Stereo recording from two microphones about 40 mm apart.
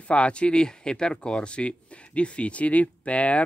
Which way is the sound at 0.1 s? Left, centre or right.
Left.